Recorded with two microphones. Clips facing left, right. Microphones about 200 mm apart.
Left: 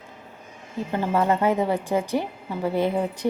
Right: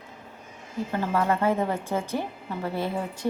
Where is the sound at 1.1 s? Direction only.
20° left (ahead or behind).